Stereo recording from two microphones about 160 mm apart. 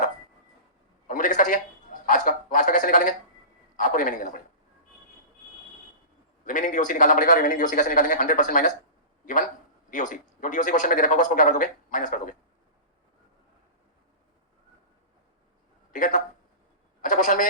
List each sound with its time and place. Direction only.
1.0 s a sound: 55° left (ahead or behind)
6.4 s speech: 55° left (ahead or behind)
15.9 s a man's voice: 55° left (ahead or behind)